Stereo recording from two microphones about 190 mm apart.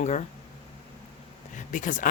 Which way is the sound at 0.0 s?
40° left (ahead or behind).